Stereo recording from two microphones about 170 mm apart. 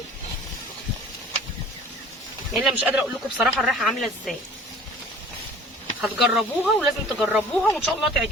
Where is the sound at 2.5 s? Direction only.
5° right (ahead or behind).